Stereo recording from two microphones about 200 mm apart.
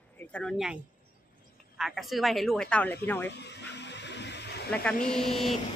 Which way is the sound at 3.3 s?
60° left (ahead or behind).